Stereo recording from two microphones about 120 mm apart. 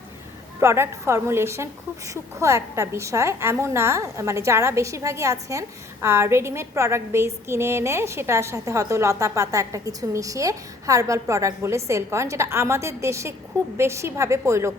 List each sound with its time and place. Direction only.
0.6 s a woman's voice: 25° right (ahead or behind)